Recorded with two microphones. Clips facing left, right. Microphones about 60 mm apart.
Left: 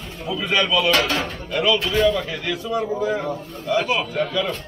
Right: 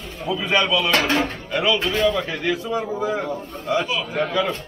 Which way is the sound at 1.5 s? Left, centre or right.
Centre.